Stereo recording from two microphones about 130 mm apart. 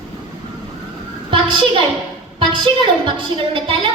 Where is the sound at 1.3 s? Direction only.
40° right (ahead or behind).